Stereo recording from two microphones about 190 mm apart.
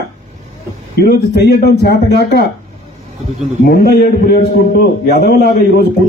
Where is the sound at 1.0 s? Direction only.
60° left (ahead or behind).